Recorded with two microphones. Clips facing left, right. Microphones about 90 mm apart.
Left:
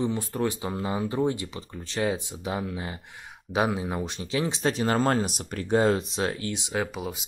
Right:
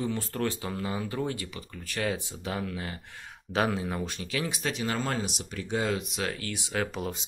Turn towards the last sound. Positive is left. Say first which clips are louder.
# even
turn(degrees=5)  # may be behind; listen again after turning